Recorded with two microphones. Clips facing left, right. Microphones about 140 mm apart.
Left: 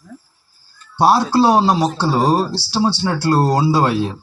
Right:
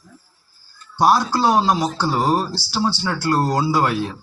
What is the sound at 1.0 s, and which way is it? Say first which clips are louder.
Speech: left 3 dB; 30° left (ahead or behind).